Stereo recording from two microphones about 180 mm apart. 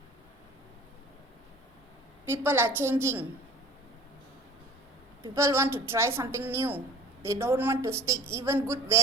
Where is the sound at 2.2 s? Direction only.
15° right (ahead or behind).